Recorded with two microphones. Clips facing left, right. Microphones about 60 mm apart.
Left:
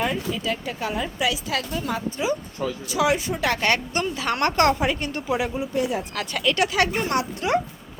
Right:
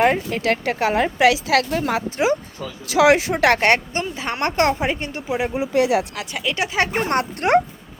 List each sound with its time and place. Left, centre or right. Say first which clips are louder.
0.0 s a woman's voice: right 7 dB; right
2.9 s a woman's voice: right 8 dB; right
4.1 s speech: left 1 dB; right
5.5 s speech: right 6 dB; right
6.1 s speech: left 2 dB; centre
6.7 s speech: right 1 dB; right
7.0 s speech: right 4 dB; right